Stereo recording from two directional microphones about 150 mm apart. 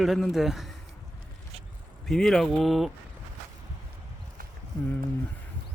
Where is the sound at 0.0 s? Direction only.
Centre (ahead or behind).